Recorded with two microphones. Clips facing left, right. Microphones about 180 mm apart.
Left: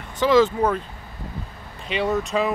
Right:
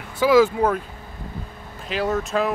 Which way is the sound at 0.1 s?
10° right (ahead or behind).